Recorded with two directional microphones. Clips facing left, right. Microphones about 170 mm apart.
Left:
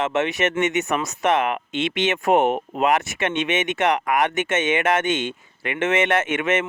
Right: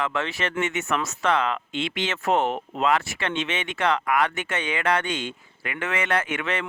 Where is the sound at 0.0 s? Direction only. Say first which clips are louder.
Left 6 dB; 20° left (ahead or behind).